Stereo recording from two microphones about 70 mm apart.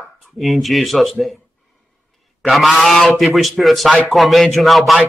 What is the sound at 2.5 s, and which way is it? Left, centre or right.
A man's voice, centre.